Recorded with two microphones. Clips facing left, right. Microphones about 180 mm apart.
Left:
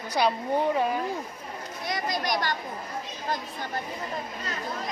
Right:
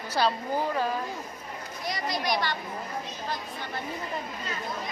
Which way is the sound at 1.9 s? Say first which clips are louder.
Left 1 dB; 50° left (ahead or behind).